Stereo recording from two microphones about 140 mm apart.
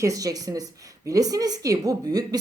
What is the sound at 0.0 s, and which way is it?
Speech, 25° right (ahead or behind).